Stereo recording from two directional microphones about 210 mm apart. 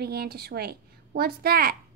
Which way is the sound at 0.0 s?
50° right (ahead or behind).